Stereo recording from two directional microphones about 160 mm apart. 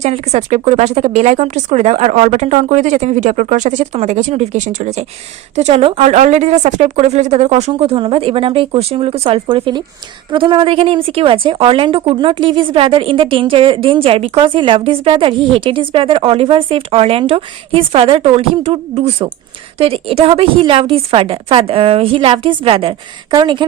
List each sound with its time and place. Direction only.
0.0 s a woman's voice: 40° right (ahead or behind)